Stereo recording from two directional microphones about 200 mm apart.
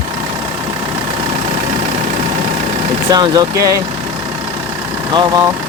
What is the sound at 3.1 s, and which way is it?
Speech, 20° right (ahead or behind).